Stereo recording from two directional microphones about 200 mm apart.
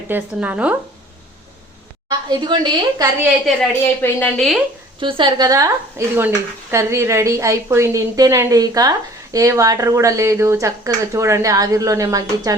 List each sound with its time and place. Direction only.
0.1 s speech: 10° right (ahead or behind)
2.0 s a woman's voice: 20° right (ahead or behind)
4.0 s a woman's voice: 5° left (ahead or behind)
4.9 s speech: 25° right (ahead or behind)